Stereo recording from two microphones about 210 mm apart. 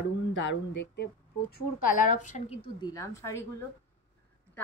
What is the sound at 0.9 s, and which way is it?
Speech, 55° left (ahead or behind).